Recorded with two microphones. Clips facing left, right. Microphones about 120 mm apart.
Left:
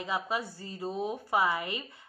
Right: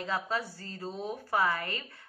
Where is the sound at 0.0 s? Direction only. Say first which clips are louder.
Even; 15° left (ahead or behind).